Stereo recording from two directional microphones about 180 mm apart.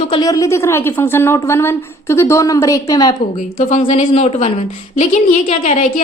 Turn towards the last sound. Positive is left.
turn(degrees=40)  # may be behind; listen again after turning